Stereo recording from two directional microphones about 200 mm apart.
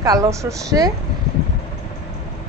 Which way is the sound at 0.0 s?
15° right (ahead or behind).